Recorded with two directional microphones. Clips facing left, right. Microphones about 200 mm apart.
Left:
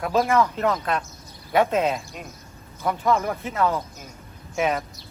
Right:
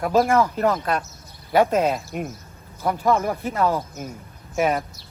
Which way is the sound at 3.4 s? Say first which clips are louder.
Right 2 dB; 40° right (ahead or behind).